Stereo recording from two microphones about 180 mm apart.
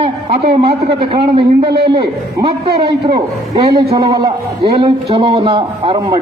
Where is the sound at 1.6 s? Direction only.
60° right (ahead or behind).